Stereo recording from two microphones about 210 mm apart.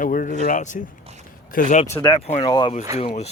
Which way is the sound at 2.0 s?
20° left (ahead or behind).